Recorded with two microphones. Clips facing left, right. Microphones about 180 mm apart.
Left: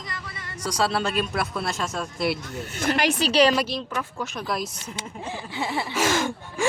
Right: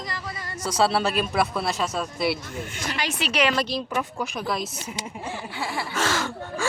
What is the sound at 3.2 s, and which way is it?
Speech, 35° left (ahead or behind).